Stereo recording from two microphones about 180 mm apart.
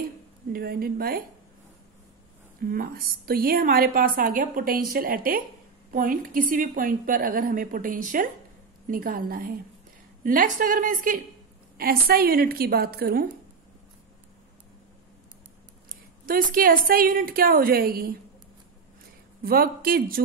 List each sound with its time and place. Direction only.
0.5 s a woman's voice: 60° right (ahead or behind)
2.6 s a woman's voice: 50° right (ahead or behind)
15.9 s a woman's voice: 50° right (ahead or behind)
19.4 s a woman's voice: 55° right (ahead or behind)